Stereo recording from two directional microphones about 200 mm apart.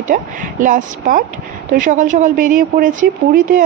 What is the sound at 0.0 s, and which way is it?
A woman's voice, 40° right (ahead or behind).